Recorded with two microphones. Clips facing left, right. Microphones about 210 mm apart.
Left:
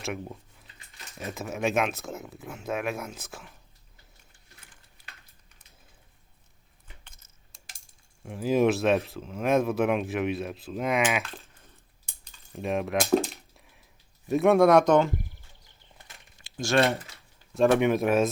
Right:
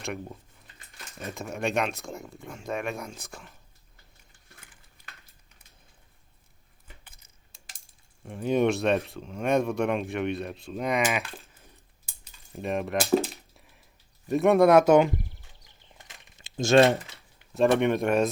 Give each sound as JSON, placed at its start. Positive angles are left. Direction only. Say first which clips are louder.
{"t": 0.0, "sound": "a sound", "louder": "left 1 dB", "side_deg": 0}
{"t": 1.2, "sound": "speech", "louder": "left 2 dB", "side_deg": 0}
{"t": 7.0, "sound": "keys jangling", "louder": "even", "side_deg": -5}
{"t": 8.2, "sound": "speech", "louder": "left 1 dB", "side_deg": 0}
{"t": 11.2, "sound": "a sound", "louder": "even", "side_deg": -5}
{"t": 14.3, "sound": "speech", "louder": "even", "side_deg": 0}
{"t": 15.6, "sound": "bird", "louder": "right 1 dB", "side_deg": -20}
{"t": 17.5, "sound": "speech", "louder": "left 1 dB", "side_deg": 0}